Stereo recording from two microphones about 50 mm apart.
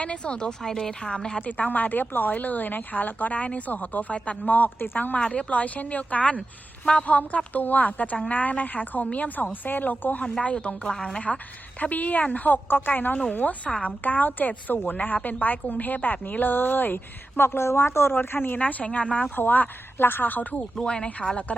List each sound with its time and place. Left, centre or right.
0.0 s a woman's voice: left
1.4 s speech: left
10.4 s speech: left
19.4 s speech: left
20.8 s a woman's voice: centre